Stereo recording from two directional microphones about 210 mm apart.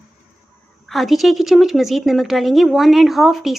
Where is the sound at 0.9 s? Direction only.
Centre (ahead or behind).